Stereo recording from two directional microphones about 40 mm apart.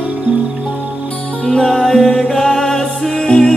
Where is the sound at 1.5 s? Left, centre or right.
Centre.